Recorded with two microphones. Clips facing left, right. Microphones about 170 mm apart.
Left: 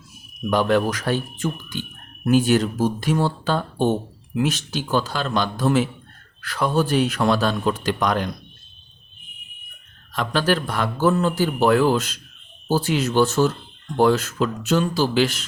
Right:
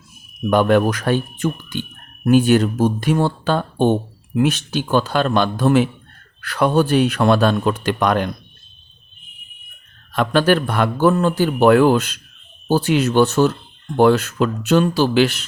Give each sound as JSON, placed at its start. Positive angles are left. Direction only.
{"t": 0.5, "sound": "a man's voice", "side_deg": -55}
{"t": 10.1, "sound": "a man's voice", "side_deg": -60}